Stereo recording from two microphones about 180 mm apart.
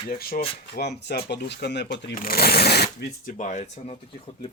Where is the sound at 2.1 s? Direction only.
55° left (ahead or behind).